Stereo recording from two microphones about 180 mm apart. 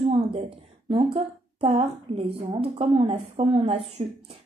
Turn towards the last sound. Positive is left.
turn(degrees=-35)  # may be behind; listen again after turning